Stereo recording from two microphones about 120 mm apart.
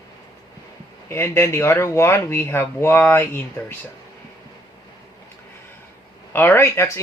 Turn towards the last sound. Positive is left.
turn(degrees=20)  # may be behind; listen again after turning